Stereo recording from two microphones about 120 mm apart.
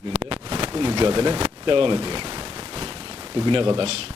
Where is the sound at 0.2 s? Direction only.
50° right (ahead or behind).